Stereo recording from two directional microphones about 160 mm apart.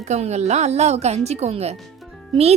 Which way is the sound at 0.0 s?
45° right (ahead or behind).